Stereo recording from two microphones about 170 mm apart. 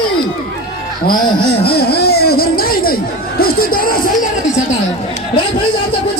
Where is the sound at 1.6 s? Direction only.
65° left (ahead or behind).